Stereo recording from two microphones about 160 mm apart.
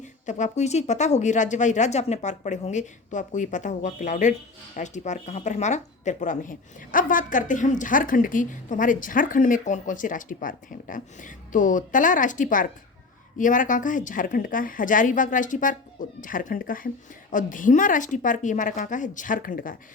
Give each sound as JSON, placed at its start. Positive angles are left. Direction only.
{"t": 0.0, "sound": "a woman's voice", "side_deg": 50}